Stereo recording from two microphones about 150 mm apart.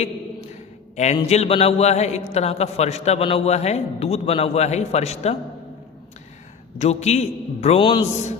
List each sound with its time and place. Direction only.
0.9 s a man's voice: 50° left (ahead or behind)
6.7 s a man's voice: 50° left (ahead or behind)
7.8 s a man's voice: 30° left (ahead or behind)
8.0 s a man's voice: 50° left (ahead or behind)